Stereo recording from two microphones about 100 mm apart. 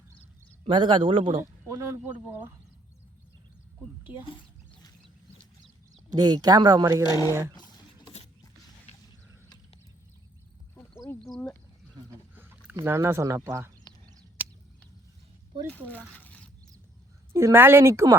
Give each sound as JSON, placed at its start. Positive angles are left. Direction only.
{"t": 0.7, "sound": "speech", "side_deg": -50}
{"t": 1.4, "sound": "speech", "side_deg": -30}
{"t": 6.1, "sound": "speech", "side_deg": -45}
{"t": 7.0, "sound": "speech", "side_deg": 40}
{"t": 12.3, "sound": "a sound", "side_deg": -15}
{"t": 12.7, "sound": "speech", "side_deg": -25}
{"t": 16.1, "sound": "a sound", "side_deg": 15}
{"t": 17.3, "sound": "speech", "side_deg": -25}